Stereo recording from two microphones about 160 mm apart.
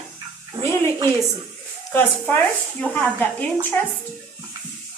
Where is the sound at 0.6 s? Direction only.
35° right (ahead or behind).